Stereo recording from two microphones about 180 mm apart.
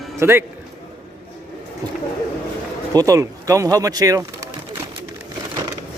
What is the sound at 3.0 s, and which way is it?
A man's voice, 20° right (ahead or behind).